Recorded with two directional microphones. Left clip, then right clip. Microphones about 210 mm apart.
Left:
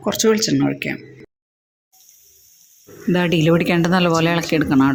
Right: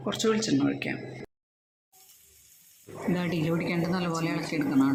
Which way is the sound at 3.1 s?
35° left (ahead or behind).